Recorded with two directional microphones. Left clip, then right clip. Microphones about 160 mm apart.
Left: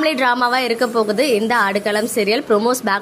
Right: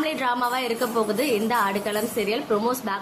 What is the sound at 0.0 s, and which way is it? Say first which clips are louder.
A woman's voice: left 8 dB; 35° left (ahead or behind).